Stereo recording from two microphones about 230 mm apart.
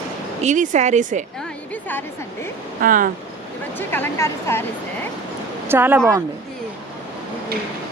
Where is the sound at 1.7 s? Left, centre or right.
Centre.